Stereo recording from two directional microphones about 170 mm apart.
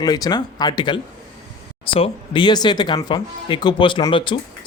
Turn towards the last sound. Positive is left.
turn(degrees=30)  # may be behind; listen again after turning